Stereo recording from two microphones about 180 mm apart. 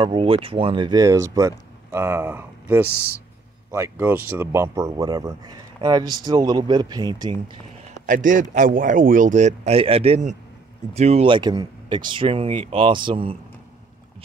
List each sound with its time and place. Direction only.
0.0 s speech: 30° right (ahead or behind)
8.1 s a man's voice: 45° right (ahead or behind); by 13.4 s 30° right (ahead or behind)